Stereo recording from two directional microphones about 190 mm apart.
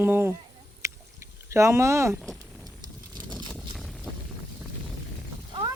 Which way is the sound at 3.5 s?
Centre (ahead or behind).